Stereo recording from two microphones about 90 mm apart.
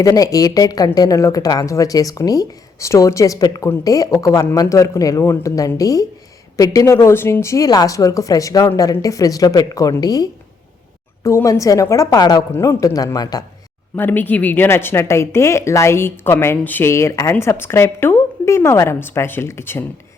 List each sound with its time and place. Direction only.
0.0 s a woman's voice: 40° left (ahead or behind)
6.9 s a woman's voice: 25° left (ahead or behind); by 10.2 s 45° left (ahead or behind)
11.2 s a woman's voice: 30° left (ahead or behind); by 13.4 s 45° left (ahead or behind)
13.9 s a woman's voice: 20° left (ahead or behind)